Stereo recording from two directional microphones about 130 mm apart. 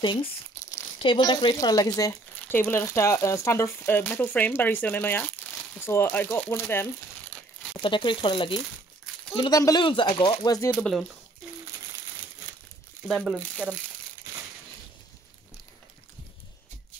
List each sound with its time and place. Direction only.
0.0 s speech: 40° left (ahead or behind); by 7.3 s 15° left (ahead or behind)
7.7 s speech: 35° left (ahead or behind)
9.5 s speech: 25° left (ahead or behind)
10.7 s speech: 5° left (ahead or behind)